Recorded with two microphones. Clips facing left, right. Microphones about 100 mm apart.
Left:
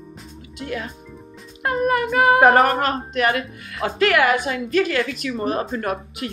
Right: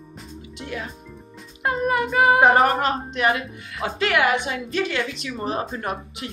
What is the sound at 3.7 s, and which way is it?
Speech, 40° left (ahead or behind).